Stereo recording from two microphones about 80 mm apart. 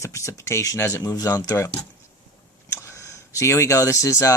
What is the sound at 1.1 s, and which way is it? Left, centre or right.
Speech, left.